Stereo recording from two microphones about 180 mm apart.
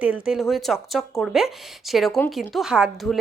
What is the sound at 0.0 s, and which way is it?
A woman's voice, 5° right (ahead or behind).